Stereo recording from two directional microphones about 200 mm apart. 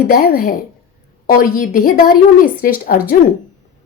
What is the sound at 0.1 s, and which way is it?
A woman's voice, 45° left (ahead or behind).